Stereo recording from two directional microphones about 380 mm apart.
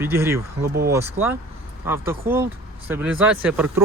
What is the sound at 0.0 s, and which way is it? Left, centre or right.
Speech, centre.